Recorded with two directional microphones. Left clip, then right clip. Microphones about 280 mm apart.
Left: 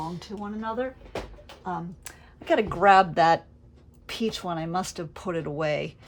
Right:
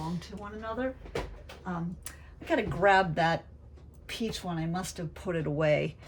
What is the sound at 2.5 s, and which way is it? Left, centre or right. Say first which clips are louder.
Speech: left 6 dB; centre.